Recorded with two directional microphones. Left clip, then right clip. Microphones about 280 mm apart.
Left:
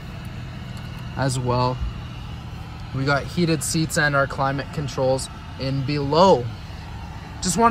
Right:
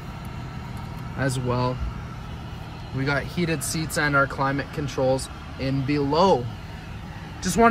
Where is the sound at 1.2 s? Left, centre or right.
Centre.